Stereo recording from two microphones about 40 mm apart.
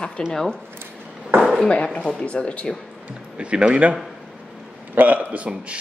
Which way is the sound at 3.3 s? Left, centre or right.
Right.